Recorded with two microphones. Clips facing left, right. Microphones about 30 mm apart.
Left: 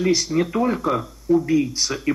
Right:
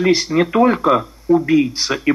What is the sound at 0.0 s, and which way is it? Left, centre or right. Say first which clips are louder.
Speech: right 5 dB; right.